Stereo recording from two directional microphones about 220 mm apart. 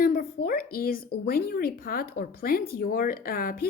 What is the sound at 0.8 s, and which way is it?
A woman's voice, 40° left (ahead or behind).